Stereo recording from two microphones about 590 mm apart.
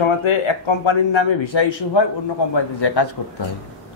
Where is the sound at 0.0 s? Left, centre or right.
Left.